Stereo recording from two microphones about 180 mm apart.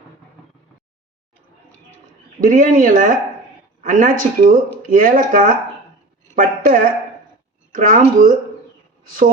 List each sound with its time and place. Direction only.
2.4 s speech: 45° right (ahead or behind)